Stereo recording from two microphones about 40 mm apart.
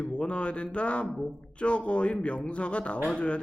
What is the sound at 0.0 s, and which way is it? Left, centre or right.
Speech, left.